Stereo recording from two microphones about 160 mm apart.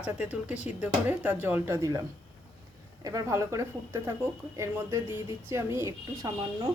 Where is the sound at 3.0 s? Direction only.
20° right (ahead or behind).